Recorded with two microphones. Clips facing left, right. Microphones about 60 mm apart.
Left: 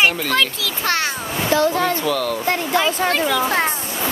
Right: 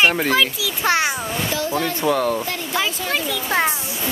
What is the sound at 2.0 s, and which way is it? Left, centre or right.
Speech, right.